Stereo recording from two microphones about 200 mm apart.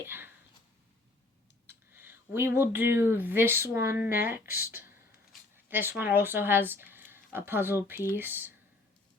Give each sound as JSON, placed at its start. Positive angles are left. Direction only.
{"t": 0.0, "sound": "speech", "side_deg": -10}
{"t": 1.6, "sound": "speech", "side_deg": -10}